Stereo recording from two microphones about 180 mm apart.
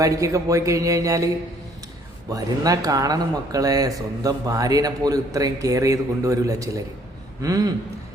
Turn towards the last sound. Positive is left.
turn(degrees=-20)  # may be behind; listen again after turning